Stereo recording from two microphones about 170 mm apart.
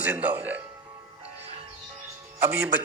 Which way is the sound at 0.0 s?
10° right (ahead or behind).